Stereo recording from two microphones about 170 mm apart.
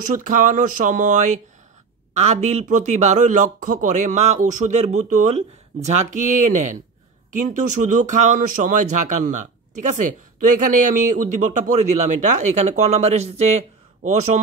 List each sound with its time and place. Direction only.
0.0 s a man's voice: 50° right (ahead or behind)